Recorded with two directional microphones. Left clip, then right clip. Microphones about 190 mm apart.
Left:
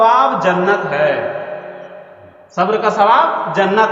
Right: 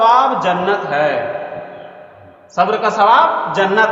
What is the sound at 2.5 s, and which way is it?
A man's voice, 30° left (ahead or behind).